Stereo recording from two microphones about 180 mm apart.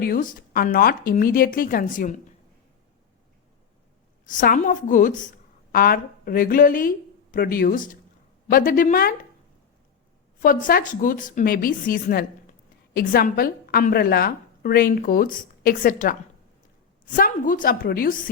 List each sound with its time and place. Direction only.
0.0 s a woman's voice: 50° left (ahead or behind)
4.3 s a woman's voice: 45° left (ahead or behind)
10.4 s a woman's voice: 50° left (ahead or behind)